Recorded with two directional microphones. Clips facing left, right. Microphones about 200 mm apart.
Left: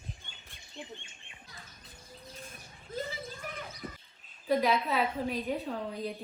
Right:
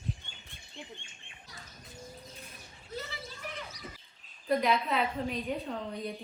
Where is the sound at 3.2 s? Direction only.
50° left (ahead or behind).